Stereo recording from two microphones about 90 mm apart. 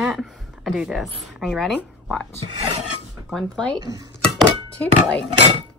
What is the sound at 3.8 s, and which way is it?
Speech, 50° right (ahead or behind).